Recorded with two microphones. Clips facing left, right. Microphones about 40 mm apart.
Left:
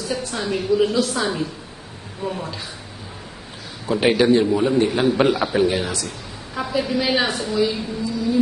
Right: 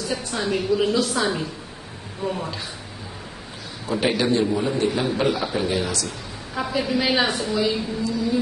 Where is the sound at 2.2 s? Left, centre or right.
Centre.